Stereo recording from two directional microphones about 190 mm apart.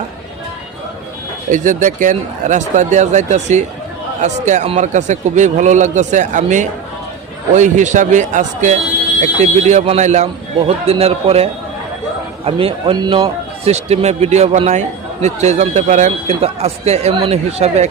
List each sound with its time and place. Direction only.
1.5 s a man's voice: 40° right (ahead or behind)
12.5 s a man's voice: 30° right (ahead or behind)